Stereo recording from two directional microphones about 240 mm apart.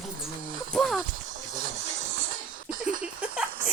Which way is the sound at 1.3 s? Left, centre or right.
Right.